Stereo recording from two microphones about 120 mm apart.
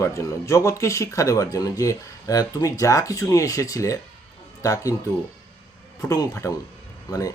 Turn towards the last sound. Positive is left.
turn(degrees=30)  # may be behind; listen again after turning